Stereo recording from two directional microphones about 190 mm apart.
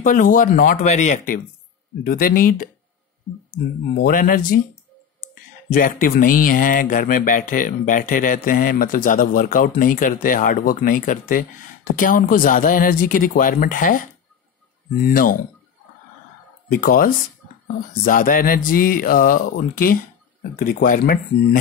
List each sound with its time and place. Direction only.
0.0 s speech: 45° left (ahead or behind)
3.9 s speech: 50° left (ahead or behind)
5.7 s speech: 50° left (ahead or behind)
16.7 s speech: 50° left (ahead or behind)